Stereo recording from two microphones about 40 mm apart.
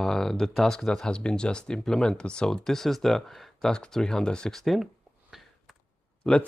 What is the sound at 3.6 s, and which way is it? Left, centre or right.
Speech, centre.